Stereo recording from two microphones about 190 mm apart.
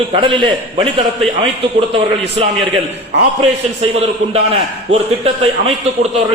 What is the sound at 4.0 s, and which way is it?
A man's voice, 30° right (ahead or behind).